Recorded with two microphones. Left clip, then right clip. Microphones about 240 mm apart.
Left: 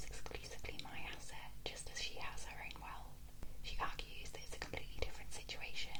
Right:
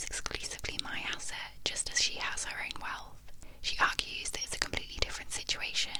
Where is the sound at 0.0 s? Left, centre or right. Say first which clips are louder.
Right 13 dB; right.